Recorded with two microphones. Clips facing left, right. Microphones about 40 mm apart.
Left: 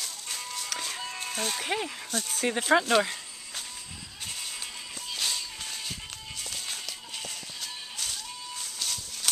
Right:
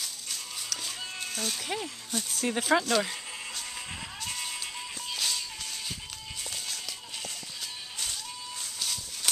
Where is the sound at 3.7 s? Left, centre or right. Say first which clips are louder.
Right 5 dB; right.